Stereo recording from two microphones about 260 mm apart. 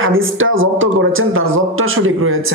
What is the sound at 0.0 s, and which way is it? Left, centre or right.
Speech, right.